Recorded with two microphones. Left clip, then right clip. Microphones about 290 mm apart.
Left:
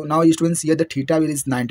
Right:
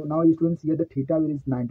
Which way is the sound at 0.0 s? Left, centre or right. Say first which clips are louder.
Left 5 dB; left.